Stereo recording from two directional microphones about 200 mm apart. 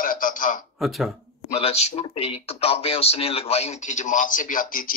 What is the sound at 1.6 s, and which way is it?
Speech, 30° left (ahead or behind).